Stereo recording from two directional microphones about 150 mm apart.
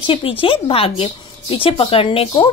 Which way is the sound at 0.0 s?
35° left (ahead or behind).